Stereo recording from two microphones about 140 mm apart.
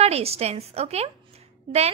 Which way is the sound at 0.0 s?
45° right (ahead or behind).